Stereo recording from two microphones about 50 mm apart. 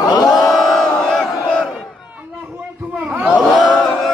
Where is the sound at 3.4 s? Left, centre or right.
Centre.